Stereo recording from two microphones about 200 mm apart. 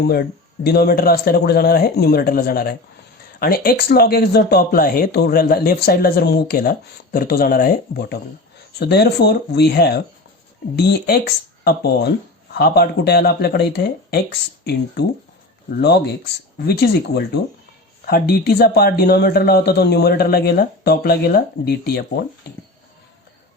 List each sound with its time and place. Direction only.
0.0 s speech: 50° left (ahead or behind)
16.6 s speech: 50° left (ahead or behind)